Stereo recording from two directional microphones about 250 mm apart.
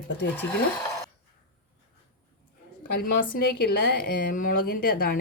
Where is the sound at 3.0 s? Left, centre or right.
Left.